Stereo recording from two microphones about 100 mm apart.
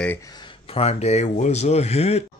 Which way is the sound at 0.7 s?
90° left.